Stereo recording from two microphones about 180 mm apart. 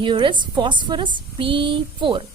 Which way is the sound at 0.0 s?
25° right (ahead or behind).